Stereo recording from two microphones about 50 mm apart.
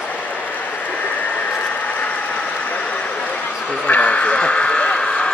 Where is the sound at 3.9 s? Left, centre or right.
Left.